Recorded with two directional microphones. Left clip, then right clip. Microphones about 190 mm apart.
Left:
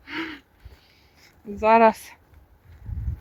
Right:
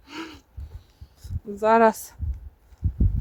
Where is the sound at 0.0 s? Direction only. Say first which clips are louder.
Left 5 dB; 10° right (ahead or behind).